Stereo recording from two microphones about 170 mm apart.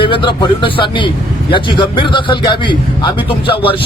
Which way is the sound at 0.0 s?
30° left (ahead or behind).